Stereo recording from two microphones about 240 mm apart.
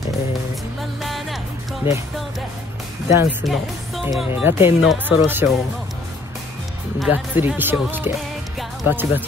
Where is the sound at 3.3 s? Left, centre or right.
Centre.